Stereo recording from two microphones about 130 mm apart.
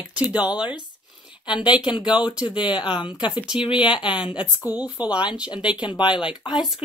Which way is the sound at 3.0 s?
35° left (ahead or behind).